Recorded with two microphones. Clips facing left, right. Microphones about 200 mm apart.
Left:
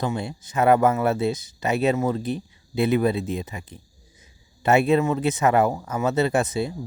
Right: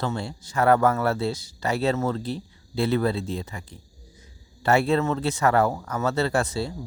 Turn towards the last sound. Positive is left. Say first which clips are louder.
# left 3 dB
turn(degrees=20)  # may be behind; listen again after turning